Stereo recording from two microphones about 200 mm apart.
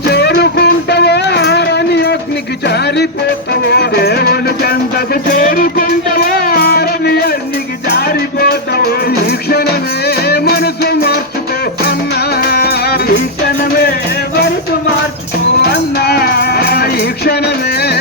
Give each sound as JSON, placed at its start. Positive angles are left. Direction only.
{"t": 0.1, "sound": "music", "side_deg": 55}
{"t": 12.4, "sound": "music", "side_deg": 50}
{"t": 15.7, "sound": "music", "side_deg": 50}